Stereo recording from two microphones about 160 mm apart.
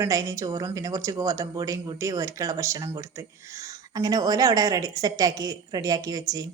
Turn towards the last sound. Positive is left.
turn(degrees=-25)  # may be behind; listen again after turning